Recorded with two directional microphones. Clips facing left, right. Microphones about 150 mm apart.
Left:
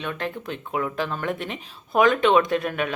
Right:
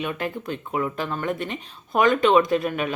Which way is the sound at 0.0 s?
10° right (ahead or behind).